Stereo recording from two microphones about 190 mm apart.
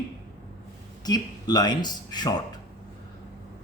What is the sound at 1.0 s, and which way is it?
Speech, 20° left (ahead or behind).